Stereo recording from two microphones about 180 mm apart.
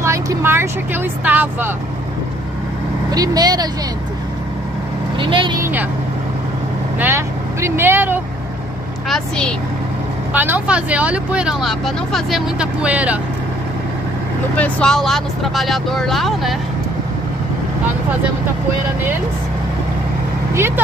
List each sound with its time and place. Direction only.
0.0 s speech: 15° right (ahead or behind)
3.1 s speech: 20° right (ahead or behind)
5.2 s speech: 25° right (ahead or behind)
5.6 s speech: 10° right (ahead or behind)
7.0 s speech: 15° right (ahead or behind)
10.3 s speech: 10° right (ahead or behind)
14.6 s speech: 5° left (ahead or behind)
20.5 s speech: 15° right (ahead or behind)